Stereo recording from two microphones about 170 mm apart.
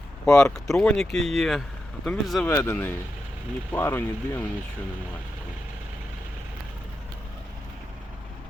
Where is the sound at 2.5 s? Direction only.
15° left (ahead or behind).